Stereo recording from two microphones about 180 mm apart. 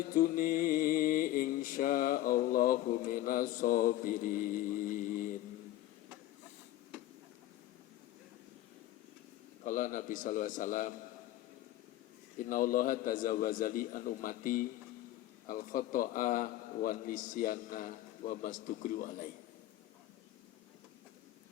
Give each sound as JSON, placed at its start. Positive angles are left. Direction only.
{"t": 0.1, "sound": "mantra", "side_deg": 50}
{"t": 9.6, "sound": "a man's voice", "side_deg": 45}
{"t": 12.4, "sound": "a man's voice", "side_deg": 50}